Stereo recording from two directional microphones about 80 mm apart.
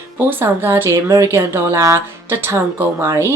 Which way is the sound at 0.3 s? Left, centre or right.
Right.